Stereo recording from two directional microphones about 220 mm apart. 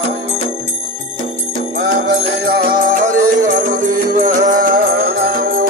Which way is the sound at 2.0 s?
40° right (ahead or behind).